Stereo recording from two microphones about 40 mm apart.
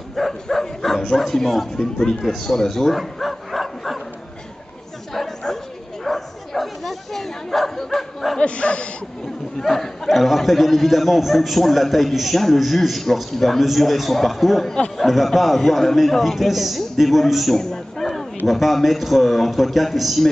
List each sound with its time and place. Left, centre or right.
0.1 s a man's voice: centre
3.0 s bow-wow: centre
5.1 s bow-wow: centre
8.4 s speech: left
9.6 s a man's voice: centre
17.6 s a sound: centre
18.5 s a man's voice: centre